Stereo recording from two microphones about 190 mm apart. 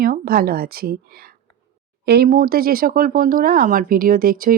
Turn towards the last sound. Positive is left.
turn(degrees=-50)  # may be behind; listen again after turning